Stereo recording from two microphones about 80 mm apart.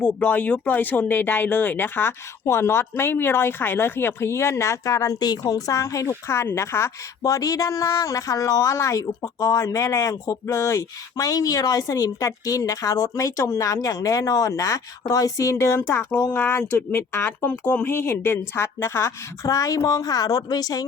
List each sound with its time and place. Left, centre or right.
0.0 s speech: centre; by 5.1 s left
5.2 s speech: left